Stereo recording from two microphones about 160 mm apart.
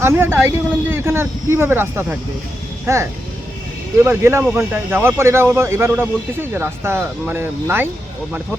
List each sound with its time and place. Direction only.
0.0 s speech: 15° right (ahead or behind)